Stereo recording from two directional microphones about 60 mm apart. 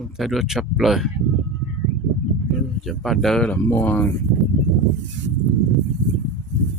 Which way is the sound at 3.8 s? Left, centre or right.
Left.